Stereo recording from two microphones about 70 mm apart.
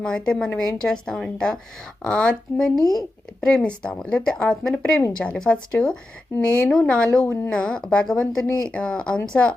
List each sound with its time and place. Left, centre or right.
0.0 s speech: centre